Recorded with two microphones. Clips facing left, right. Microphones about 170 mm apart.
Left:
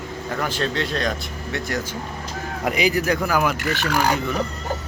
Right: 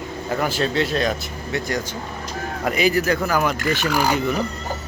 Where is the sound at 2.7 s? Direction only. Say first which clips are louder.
Right 1 dB; 15° left (ahead or behind); by 4.2 s centre (ahead or behind).